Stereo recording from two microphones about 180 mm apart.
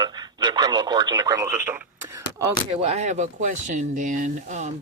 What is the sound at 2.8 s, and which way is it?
Speech, 35° right (ahead or behind).